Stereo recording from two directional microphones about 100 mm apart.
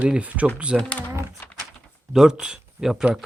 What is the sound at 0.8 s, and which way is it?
Speech, 15° left (ahead or behind).